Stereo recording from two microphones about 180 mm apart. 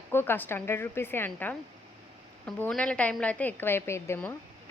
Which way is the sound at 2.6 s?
5° left (ahead or behind).